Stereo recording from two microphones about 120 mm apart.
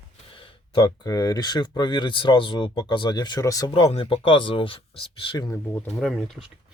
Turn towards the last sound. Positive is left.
turn(degrees=0)  # may be behind; listen again after turning